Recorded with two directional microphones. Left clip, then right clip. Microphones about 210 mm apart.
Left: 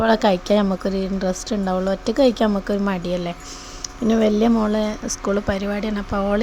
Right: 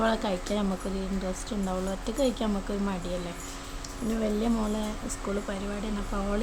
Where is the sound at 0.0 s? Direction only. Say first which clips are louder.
Left 10 dB; 35° left (ahead or behind).